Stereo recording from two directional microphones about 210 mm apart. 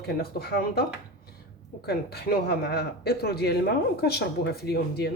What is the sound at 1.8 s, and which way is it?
Speech, 50° left (ahead or behind).